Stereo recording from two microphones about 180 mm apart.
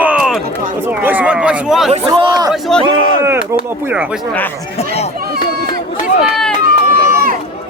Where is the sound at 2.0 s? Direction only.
20° right (ahead or behind).